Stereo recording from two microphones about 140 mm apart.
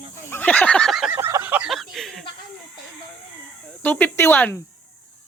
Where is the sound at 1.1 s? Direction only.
15° right (ahead or behind).